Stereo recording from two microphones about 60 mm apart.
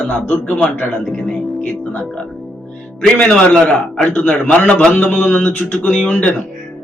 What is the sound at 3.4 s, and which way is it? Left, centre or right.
Speech, left.